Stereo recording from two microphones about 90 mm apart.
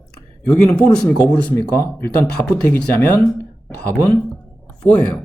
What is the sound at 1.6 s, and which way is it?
Speech, 35° left (ahead or behind).